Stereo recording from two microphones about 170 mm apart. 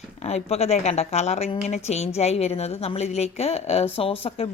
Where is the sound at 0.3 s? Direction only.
40° left (ahead or behind).